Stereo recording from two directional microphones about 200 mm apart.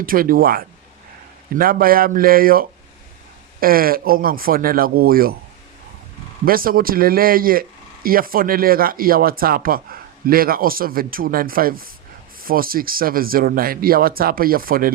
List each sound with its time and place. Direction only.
0.0 s speech: 45° right (ahead or behind)
6.4 s speech: 45° right (ahead or behind)